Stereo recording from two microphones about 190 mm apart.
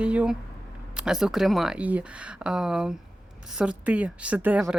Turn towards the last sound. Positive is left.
turn(degrees=-5)  # may be behind; listen again after turning